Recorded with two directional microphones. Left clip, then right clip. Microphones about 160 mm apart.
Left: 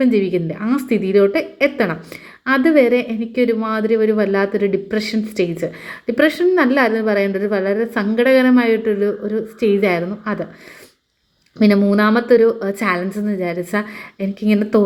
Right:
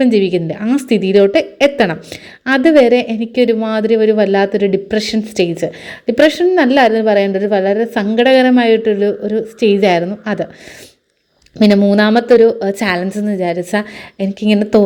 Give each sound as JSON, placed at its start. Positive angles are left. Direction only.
{"t": 0.0, "sound": "speech", "side_deg": -35}
{"t": 11.9, "sound": "speech", "side_deg": -35}